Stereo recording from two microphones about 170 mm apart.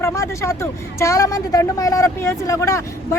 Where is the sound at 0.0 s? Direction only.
15° left (ahead or behind).